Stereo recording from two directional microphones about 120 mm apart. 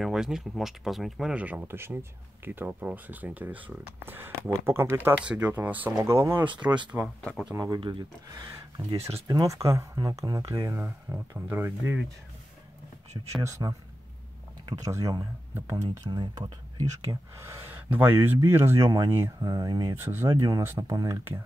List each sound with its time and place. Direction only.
0.0 s speech: 5° right (ahead or behind); by 5.1 s 20° right (ahead or behind)
5.2 s speech: 10° right (ahead or behind)
6.5 s speech: 10° right (ahead or behind)
7.2 s speech: 10° left (ahead or behind)
7.5 s speech: 30° right (ahead or behind)
7.8 s speech: 45° right (ahead or behind)
9.3 s speech: 30° right (ahead or behind)
13.4 s speech: 25° right (ahead or behind)
14.8 s speech: 30° right (ahead or behind)
16.1 s speech: 35° right (ahead or behind)